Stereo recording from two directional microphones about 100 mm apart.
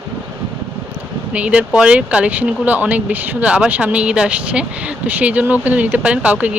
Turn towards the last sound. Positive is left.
turn(degrees=-15)  # may be behind; listen again after turning